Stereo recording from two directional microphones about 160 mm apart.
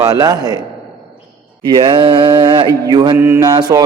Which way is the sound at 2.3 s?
20° right (ahead or behind).